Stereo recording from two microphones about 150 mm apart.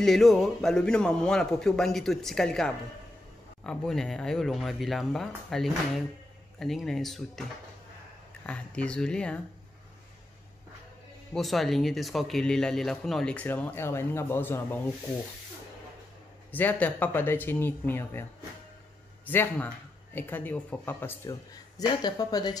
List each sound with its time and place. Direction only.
0.0 s speech: centre (ahead or behind)
8.5 s speech: 5° left (ahead or behind)
11.3 s speech: centre (ahead or behind)
16.5 s speech: 10° left (ahead or behind)
19.2 s speech: 15° left (ahead or behind)
21.7 s speech: 25° left (ahead or behind)